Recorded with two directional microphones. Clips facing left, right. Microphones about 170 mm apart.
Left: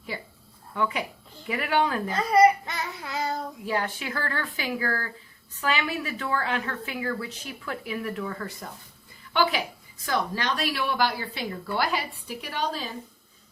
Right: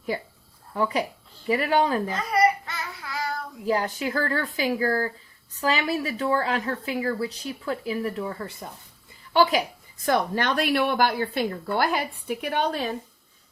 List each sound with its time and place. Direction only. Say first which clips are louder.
0.7 s a woman's voice: right 3 dB; 35° right (ahead or behind)
2.3 s child singing: left 4 dB; 20° left (ahead or behind)
3.7 s a woman's voice: right 5 dB; 35° right (ahead or behind)
9.3 s a woman's voice: right 4 dB; 40° right (ahead or behind)
10.1 s speech: right 4 dB; 55° right (ahead or behind)